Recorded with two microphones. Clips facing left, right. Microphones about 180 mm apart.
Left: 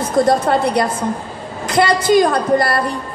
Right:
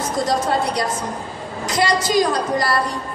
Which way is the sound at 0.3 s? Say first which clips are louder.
Left 5 dB; 55° left (ahead or behind).